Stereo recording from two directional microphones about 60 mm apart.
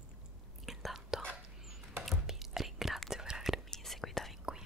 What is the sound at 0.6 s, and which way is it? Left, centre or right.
Whispering, centre.